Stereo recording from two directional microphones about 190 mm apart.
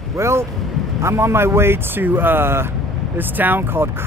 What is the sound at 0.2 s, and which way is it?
Speech, 15° right (ahead or behind).